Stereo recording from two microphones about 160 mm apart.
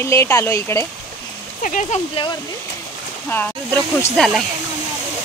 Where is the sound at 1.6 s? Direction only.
50° left (ahead or behind).